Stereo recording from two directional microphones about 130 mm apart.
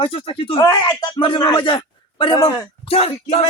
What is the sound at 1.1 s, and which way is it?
A man's voice, 40° left (ahead or behind).